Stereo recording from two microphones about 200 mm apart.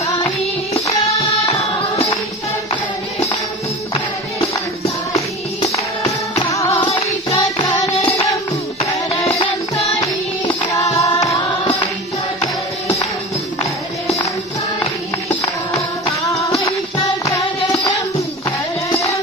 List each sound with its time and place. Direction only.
6.5 s music: 15° left (ahead or behind)
10.6 s hands: 15° left (ahead or behind)
10.9 s carnatic music: 35° left (ahead or behind)
11.1 s music: 15° left (ahead or behind)
16.3 s music: 15° left (ahead or behind)